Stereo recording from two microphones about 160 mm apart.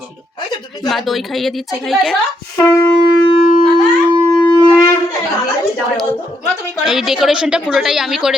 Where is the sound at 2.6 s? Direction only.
15° left (ahead or behind).